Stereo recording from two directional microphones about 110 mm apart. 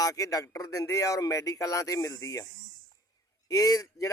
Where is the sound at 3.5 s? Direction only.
35° left (ahead or behind).